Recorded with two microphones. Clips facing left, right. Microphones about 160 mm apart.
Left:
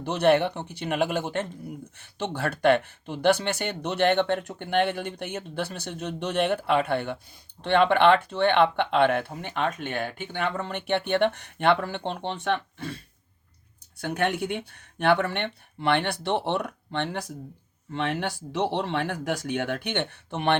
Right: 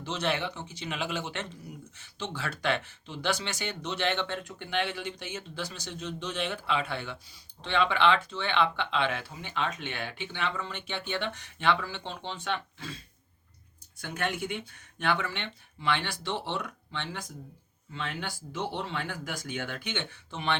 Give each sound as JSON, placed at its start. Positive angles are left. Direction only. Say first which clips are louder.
{"t": 0.0, "sound": "speech", "louder": "left 10 dB", "side_deg": 55}
{"t": 2.0, "sound": "speech", "louder": "left 7 dB", "side_deg": 60}
{"t": 14.0, "sound": "speech", "louder": "left 6 dB", "side_deg": 60}